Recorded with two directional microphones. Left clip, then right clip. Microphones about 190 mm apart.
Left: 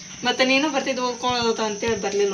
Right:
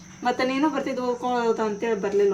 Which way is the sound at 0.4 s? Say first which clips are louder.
Left 4 dB; 45° right (ahead or behind).